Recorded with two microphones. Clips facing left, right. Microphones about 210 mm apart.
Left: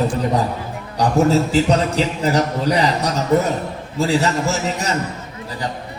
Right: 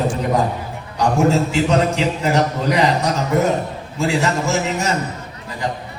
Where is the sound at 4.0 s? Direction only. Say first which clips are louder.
Left 1 dB; 35° left (ahead or behind).